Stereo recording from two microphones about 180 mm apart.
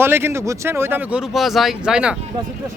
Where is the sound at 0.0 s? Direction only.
15° right (ahead or behind).